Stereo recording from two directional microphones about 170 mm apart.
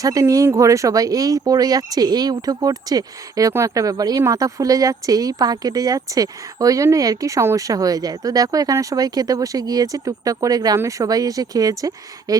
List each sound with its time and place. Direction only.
0.0 s speech: 20° right (ahead or behind)